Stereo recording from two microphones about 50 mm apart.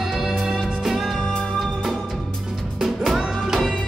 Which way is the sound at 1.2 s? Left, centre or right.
Centre.